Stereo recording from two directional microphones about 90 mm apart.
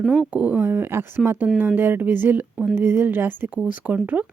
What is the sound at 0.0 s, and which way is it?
A woman's voice, 5° right (ahead or behind).